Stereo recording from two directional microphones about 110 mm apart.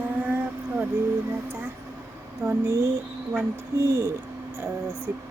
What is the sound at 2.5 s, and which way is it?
Speech, 25° right (ahead or behind).